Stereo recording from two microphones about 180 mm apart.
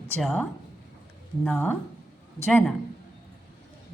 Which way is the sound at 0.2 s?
Centre (ahead or behind).